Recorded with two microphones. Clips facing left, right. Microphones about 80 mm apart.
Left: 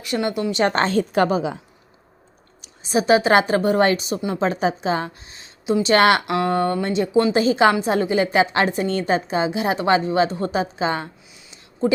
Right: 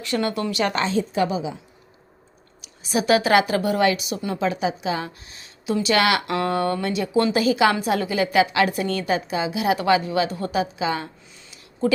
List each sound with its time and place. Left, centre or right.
0.0 s speech: centre
0.5 s a woman's voice: left
0.9 s a woman's voice: left
2.6 s a woman's voice: left
5.2 s speech: left
5.9 s a woman's voice: left
6.2 s speech: centre
6.5 s a woman's voice: left
11.5 s a sound: left